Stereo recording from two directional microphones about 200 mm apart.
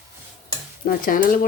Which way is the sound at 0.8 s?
45° left (ahead or behind).